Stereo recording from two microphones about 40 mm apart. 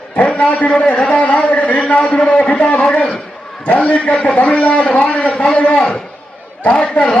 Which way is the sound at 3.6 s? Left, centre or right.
Left.